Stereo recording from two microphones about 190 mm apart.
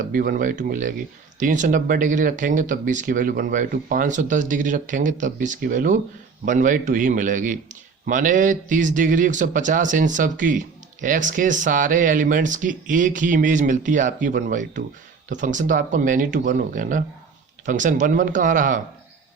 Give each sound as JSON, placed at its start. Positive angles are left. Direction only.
{"t": 0.0, "sound": "speech", "side_deg": -45}